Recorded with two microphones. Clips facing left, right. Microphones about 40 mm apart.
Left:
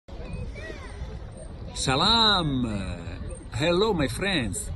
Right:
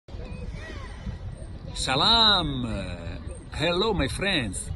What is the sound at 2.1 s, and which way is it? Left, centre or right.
A man's voice, right.